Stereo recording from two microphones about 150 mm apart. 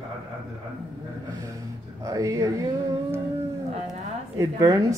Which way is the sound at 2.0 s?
20° right (ahead or behind).